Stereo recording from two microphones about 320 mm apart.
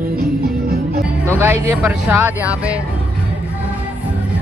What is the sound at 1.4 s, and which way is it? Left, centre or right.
Speech, centre.